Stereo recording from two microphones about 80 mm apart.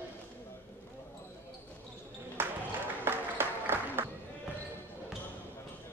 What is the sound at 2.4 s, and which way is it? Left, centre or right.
Basketball bounce, right.